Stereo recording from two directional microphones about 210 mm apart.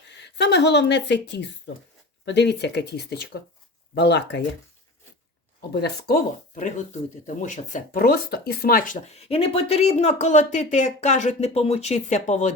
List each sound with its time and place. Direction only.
0.3 s speech: 55° left (ahead or behind)
5.7 s speech: 50° left (ahead or behind)